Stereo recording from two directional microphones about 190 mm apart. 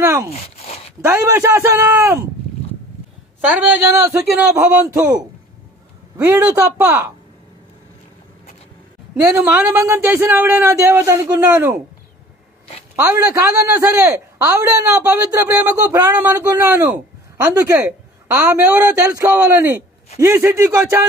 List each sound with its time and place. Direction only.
0.0 s speech: 15° right (ahead or behind)
0.3 s a sound: 35° left (ahead or behind)
1.0 s a man's voice: 15° right (ahead or behind)
3.3 s a man's voice: 10° right (ahead or behind)
9.2 s a man's voice: 10° right (ahead or behind)
12.9 s a man's voice: 10° right (ahead or behind)